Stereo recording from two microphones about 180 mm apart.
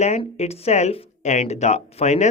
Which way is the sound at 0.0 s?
35° left (ahead or behind).